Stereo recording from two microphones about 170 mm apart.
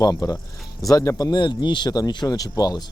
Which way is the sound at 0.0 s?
20° left (ahead or behind).